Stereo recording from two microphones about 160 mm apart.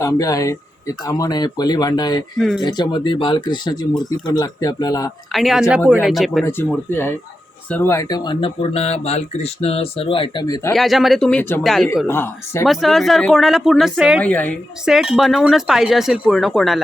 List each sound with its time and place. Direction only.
0.0 s speech: 20° left (ahead or behind)
5.3 s speech: centre (ahead or behind)
6.4 s speech: 15° left (ahead or behind); by 10.4 s 35° left (ahead or behind)
10.4 s speech: 20° left (ahead or behind)
10.7 s speech: centre (ahead or behind)
12.0 s speech: 15° left (ahead or behind)
12.6 s speech: centre (ahead or behind)
14.2 s speech: 10° left (ahead or behind)
14.8 s speech: centre (ahead or behind)